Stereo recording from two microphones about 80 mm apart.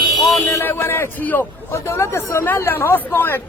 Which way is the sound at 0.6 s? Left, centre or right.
Left.